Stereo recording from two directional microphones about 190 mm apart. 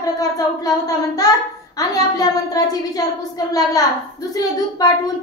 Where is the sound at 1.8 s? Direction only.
20° left (ahead or behind).